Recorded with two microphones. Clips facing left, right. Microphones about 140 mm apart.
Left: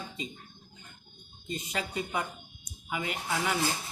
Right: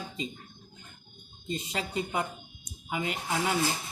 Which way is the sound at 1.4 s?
25° right (ahead or behind).